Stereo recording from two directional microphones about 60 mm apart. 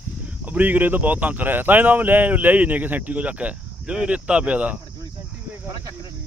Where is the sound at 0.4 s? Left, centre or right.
Right.